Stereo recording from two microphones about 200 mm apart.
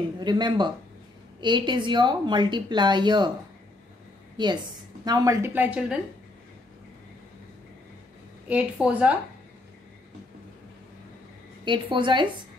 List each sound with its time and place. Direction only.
0.2 s a woman's voice: 20° right (ahead or behind)
5.0 s a woman's voice: 20° right (ahead or behind)
8.5 s a woman's voice: 5° right (ahead or behind)
11.6 s a woman's voice: 25° right (ahead or behind)